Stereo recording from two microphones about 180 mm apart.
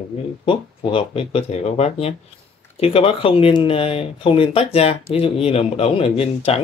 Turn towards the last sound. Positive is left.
turn(degrees=35)  # may be behind; listen again after turning